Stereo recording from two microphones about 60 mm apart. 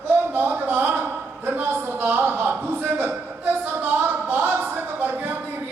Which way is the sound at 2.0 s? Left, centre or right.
Right.